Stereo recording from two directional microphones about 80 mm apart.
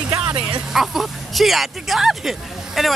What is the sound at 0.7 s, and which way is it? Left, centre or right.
Speech, centre.